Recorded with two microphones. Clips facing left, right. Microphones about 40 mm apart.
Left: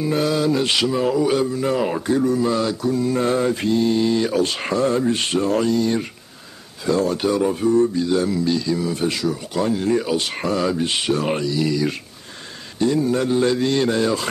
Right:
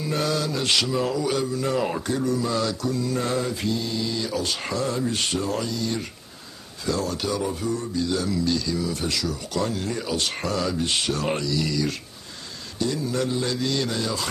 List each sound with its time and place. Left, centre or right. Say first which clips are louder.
0.0 s a man's voice: left 6 dB; centre; by 14.2 s left